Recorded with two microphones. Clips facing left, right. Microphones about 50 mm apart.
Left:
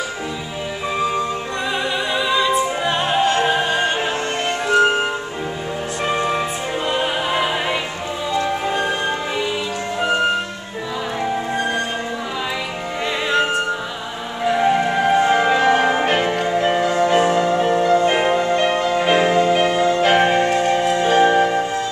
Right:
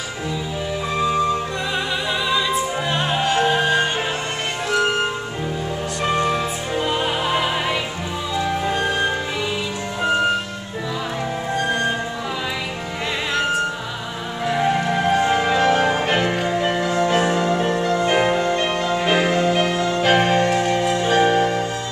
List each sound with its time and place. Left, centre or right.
2.2 s opera: centre
4.7 s music: left
6.0 s music: centre
14.4 s music: centre
16.1 s music: centre